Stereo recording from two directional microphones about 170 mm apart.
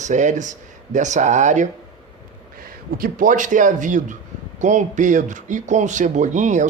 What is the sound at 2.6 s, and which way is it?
A man's voice, 60° right (ahead or behind).